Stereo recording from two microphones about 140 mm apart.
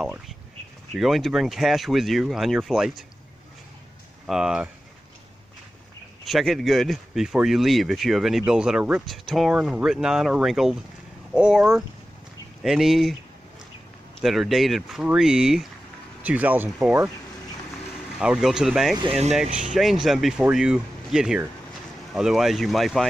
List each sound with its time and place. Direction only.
0.9 s speech: centre (ahead or behind)
4.3 s speech: 5° right (ahead or behind)
6.2 s speech: centre (ahead or behind)
14.2 s speech: centre (ahead or behind)
18.2 s speech: 5° right (ahead or behind)
19.0 s speech: 50° right (ahead or behind)
19.6 s speech: centre (ahead or behind)